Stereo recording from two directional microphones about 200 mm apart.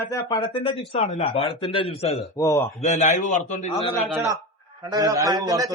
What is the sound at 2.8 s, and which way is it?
A man's voice, 35° left (ahead or behind).